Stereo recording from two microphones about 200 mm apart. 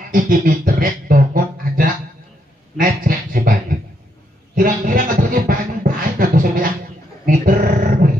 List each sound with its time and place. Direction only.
0.1 s speech: 45° right (ahead or behind)
2.8 s a sound: 45° right (ahead or behind)
4.6 s beatboxing: 45° right (ahead or behind)
7.2 s music: 45° right (ahead or behind)